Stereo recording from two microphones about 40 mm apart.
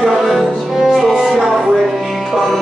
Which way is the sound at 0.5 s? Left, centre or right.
Centre.